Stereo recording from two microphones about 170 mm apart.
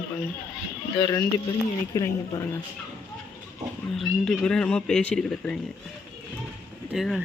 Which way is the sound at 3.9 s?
Centre (ahead or behind).